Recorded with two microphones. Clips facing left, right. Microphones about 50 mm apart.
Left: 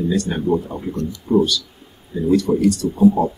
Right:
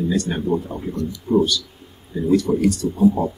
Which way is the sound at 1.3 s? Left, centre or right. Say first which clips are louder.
Left 1 dB; left.